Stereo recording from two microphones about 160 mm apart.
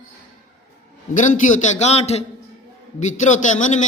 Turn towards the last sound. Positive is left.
turn(degrees=50)  # may be behind; listen again after turning